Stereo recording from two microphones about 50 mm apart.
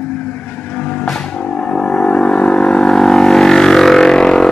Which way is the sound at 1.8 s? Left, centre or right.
Left.